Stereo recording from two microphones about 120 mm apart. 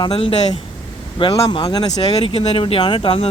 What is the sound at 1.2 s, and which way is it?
Speech, 35° left (ahead or behind).